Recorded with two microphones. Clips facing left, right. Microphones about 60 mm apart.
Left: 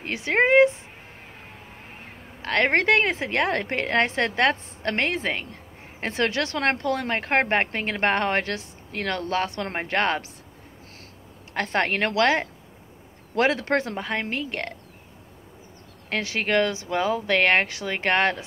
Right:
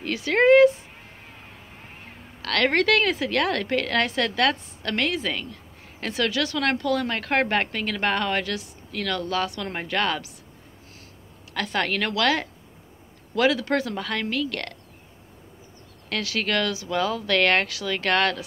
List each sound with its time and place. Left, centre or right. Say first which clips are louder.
0.0 s speech: right 2 dB; left
2.4 s a woman's voice: even; left
11.5 s a woman's voice: left 2 dB; left
16.1 s speech: left 2 dB; left